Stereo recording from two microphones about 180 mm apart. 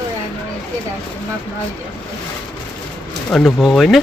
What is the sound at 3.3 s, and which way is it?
Speech, centre (ahead or behind).